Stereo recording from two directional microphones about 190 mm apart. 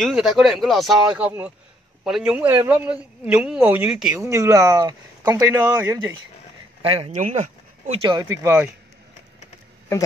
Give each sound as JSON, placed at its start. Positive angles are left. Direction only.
{"t": 0.0, "sound": "a man's voice", "side_deg": 0}
{"t": 4.2, "sound": "speech", "side_deg": -15}
{"t": 6.8, "sound": "speech", "side_deg": -30}
{"t": 7.1, "sound": "speech", "side_deg": -40}